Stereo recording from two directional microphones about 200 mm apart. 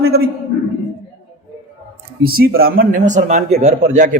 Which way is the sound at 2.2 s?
50° right (ahead or behind).